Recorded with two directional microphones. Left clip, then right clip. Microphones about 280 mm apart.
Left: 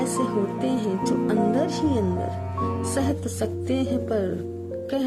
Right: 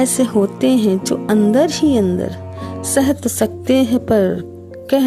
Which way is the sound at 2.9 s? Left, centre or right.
Right.